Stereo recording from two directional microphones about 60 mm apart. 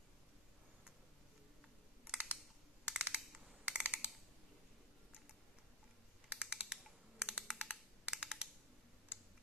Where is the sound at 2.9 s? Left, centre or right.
Right.